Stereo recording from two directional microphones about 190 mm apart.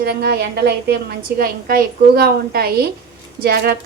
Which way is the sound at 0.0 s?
55° right (ahead or behind).